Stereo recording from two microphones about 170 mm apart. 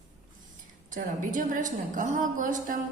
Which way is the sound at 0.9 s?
50° right (ahead or behind).